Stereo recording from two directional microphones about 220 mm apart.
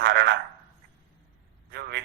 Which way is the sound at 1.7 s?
50° right (ahead or behind).